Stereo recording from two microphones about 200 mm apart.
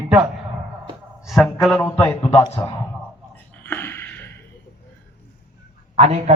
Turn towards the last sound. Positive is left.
turn(degrees=-30)  # may be behind; listen again after turning